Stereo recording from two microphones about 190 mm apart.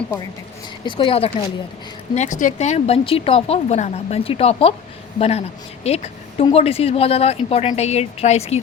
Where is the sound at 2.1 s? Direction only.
40° left (ahead or behind).